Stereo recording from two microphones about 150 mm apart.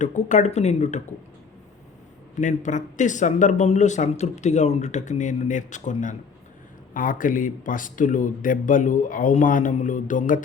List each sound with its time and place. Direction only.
0.0 s speech: 55° left (ahead or behind)
2.4 s speech: 55° left (ahead or behind)